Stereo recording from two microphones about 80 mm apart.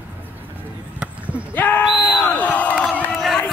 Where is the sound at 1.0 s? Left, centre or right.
Centre.